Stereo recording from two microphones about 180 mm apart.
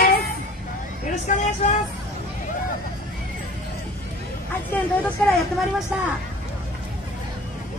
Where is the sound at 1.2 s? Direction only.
40° left (ahead or behind).